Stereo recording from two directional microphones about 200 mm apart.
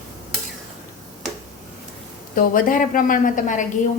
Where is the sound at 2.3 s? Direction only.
45° left (ahead or behind).